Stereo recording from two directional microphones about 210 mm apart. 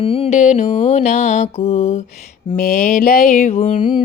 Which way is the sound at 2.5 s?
45° left (ahead or behind).